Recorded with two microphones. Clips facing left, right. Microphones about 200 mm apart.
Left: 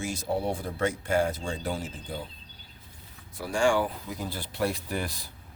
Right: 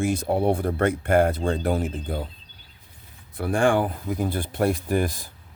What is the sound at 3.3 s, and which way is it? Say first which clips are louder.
Speech: right 4 dB; 55° right (ahead or behind).